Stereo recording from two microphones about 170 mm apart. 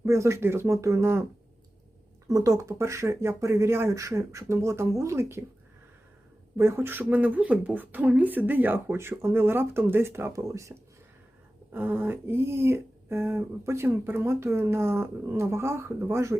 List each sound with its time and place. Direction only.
0.0 s speech: 15° right (ahead or behind)
6.6 s speech: 15° right (ahead or behind)